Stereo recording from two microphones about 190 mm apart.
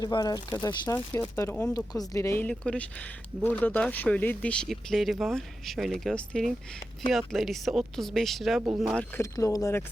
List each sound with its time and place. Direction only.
0.0 s speech: 20° left (ahead or behind); by 8.6 s centre (ahead or behind)
9.1 s speech: 15° left (ahead or behind)